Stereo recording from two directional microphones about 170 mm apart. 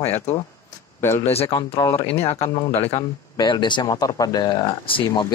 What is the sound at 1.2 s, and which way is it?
Speech, 35° left (ahead or behind).